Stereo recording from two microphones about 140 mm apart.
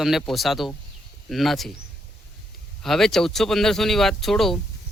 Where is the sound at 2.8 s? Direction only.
Centre (ahead or behind).